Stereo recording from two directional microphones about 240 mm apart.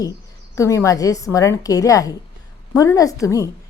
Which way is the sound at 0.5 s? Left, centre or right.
Centre.